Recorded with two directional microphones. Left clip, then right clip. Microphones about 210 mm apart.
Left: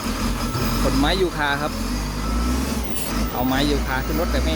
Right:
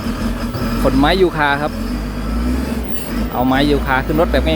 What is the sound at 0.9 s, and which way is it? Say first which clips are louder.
Speech: right 8 dB; 15° right (ahead or behind).